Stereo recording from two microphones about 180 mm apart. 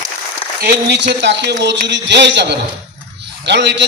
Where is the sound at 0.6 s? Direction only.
65° right (ahead or behind).